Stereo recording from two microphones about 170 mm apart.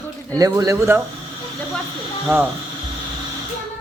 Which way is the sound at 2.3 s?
15° right (ahead or behind).